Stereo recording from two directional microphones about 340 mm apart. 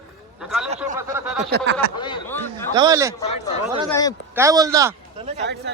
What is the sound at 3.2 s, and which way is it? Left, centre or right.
Speech, centre.